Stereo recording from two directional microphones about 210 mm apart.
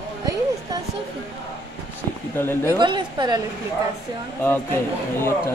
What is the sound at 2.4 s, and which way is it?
Speech, 10° left (ahead or behind).